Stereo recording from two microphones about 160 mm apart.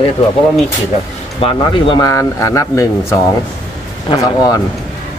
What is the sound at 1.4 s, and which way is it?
Speech, 30° left (ahead or behind).